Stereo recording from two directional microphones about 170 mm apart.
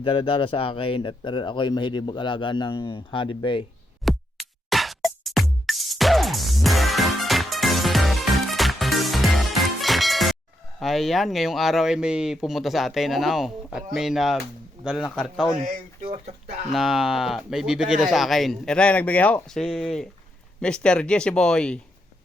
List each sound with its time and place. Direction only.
0.0 s speech: 30° left (ahead or behind)
4.0 s music: centre (ahead or behind)
10.8 s speech: centre (ahead or behind)
16.0 s speech: 40° right (ahead or behind)
16.7 s speech: centre (ahead or behind)